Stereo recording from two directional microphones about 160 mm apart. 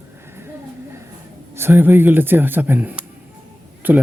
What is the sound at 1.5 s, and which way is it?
A man's voice, 15° right (ahead or behind).